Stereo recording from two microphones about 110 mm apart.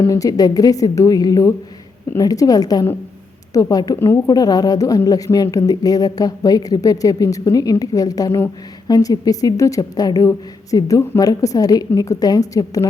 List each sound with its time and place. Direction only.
0.0 s a woman's voice: 30° left (ahead or behind)